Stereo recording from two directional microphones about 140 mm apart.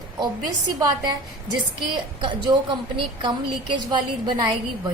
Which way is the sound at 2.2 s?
35° right (ahead or behind).